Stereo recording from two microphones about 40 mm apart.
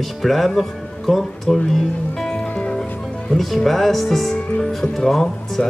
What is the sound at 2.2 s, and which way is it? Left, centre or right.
Music, centre.